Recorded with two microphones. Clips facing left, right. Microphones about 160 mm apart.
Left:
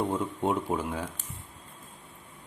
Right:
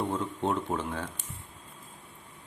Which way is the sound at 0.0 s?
10° left (ahead or behind).